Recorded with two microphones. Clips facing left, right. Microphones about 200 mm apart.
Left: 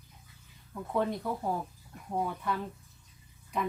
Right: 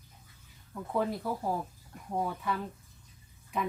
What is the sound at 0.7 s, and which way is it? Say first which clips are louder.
Speech: left 1 dB; centre (ahead or behind).